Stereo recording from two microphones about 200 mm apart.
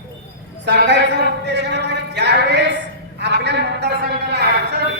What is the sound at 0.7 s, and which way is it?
A woman's voice, 60° right (ahead or behind).